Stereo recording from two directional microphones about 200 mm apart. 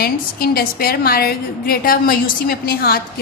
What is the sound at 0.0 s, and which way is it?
A woman's voice, 50° left (ahead or behind).